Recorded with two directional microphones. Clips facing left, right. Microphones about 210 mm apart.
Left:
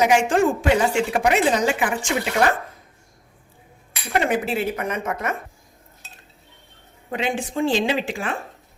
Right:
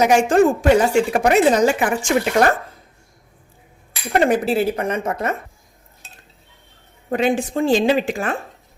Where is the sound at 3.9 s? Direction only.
35° right (ahead or behind).